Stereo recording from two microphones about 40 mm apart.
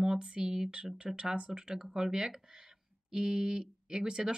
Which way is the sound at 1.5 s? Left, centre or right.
Centre.